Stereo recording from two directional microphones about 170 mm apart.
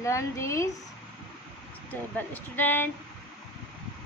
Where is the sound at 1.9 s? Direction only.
10° left (ahead or behind).